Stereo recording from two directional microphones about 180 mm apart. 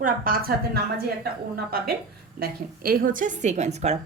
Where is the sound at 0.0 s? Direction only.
55° right (ahead or behind).